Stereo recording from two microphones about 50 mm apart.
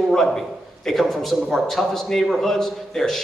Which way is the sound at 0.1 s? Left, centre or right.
Centre.